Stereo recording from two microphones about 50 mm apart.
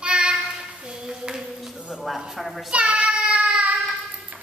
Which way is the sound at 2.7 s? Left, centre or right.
Centre.